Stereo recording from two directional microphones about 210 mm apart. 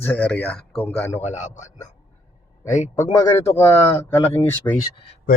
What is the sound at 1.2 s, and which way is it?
Speech, 35° left (ahead or behind).